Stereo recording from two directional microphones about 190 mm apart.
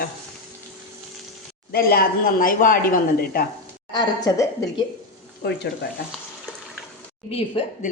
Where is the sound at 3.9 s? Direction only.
20° left (ahead or behind).